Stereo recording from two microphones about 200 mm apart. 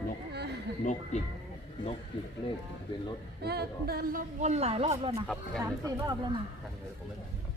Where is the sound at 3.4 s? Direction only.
55° right (ahead or behind); by 5.2 s 30° right (ahead or behind).